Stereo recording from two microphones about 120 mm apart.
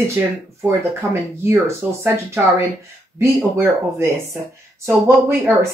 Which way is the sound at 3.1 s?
25° right (ahead or behind).